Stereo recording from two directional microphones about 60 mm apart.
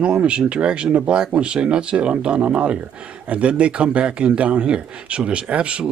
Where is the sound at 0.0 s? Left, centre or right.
Centre.